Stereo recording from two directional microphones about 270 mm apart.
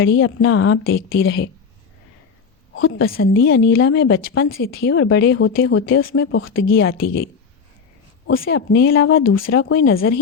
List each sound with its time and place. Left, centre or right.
0.0 s speech: left
2.7 s a woman's voice: left
8.4 s a woman's voice: left